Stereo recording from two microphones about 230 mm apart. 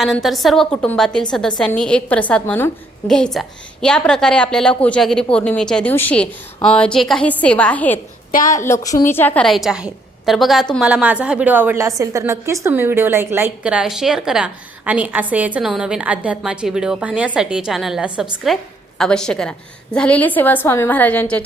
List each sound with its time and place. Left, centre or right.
0.0 s a woman's voice: centre
8.3 s a woman's voice: left
8.5 s a woman's voice: centre